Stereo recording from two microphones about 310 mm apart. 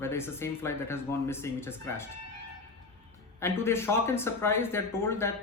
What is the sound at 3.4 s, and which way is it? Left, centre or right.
Speech, centre.